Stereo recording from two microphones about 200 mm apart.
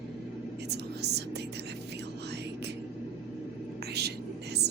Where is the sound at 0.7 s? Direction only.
55° right (ahead or behind).